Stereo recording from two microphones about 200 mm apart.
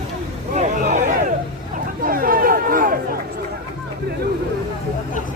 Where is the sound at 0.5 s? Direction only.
35° right (ahead or behind).